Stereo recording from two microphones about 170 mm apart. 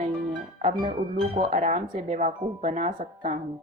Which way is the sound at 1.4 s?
45° right (ahead or behind).